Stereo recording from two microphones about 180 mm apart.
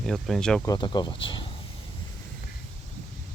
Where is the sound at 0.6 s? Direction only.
20° left (ahead or behind).